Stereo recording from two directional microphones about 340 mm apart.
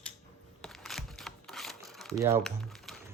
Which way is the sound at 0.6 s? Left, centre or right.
Centre.